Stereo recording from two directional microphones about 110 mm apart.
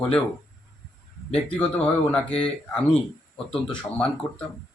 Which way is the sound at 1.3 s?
10° left (ahead or behind).